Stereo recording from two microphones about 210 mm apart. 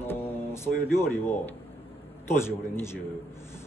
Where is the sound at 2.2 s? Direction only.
10° left (ahead or behind).